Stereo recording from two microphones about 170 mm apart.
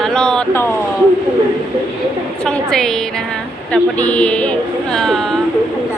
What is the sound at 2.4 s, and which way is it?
Speech, 5° left (ahead or behind).